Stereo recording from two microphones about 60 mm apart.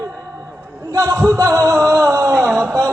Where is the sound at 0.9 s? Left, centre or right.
Right.